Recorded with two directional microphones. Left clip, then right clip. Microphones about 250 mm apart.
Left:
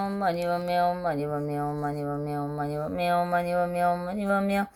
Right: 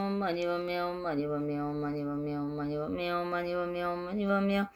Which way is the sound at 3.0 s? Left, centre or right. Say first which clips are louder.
Left 10 dB; centre.